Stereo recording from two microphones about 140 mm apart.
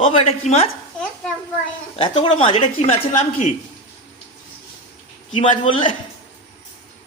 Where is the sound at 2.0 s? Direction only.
40° left (ahead or behind).